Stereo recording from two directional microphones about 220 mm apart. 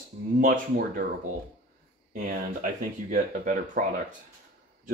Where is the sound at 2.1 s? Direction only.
35° right (ahead or behind).